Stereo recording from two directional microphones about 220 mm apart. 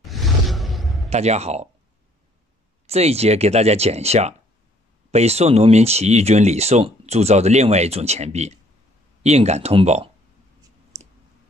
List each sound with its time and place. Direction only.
0.0 s a sound: centre (ahead or behind)
1.1 s speech: 30° right (ahead or behind)
2.9 s speech: 30° right (ahead or behind)